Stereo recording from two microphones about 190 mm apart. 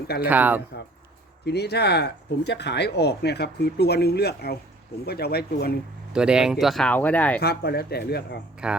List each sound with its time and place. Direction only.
0.3 s speech: 10° right (ahead or behind)
1.5 s speech: 60° left (ahead or behind)
6.1 s speech: 5° right (ahead or behind)
7.3 s speech: 55° left (ahead or behind)
8.6 s speech: 5° right (ahead or behind)